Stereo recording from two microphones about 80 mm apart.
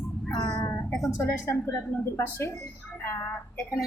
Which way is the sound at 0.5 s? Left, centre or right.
Left.